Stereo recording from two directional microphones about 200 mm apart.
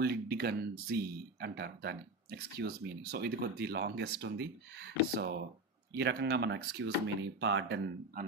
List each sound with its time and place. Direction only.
0.0 s speech: 55° right (ahead or behind)